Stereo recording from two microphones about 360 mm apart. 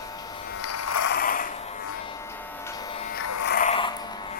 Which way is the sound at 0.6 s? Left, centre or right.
Left.